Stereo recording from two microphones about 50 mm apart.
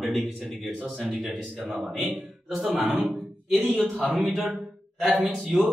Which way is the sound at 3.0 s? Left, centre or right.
Centre.